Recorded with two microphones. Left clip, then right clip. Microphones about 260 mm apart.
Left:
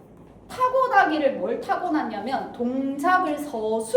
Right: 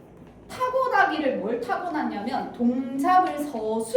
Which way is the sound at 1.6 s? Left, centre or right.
Left.